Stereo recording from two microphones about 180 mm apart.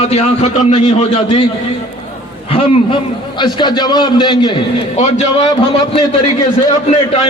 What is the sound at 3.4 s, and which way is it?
A man's voice, 25° left (ahead or behind).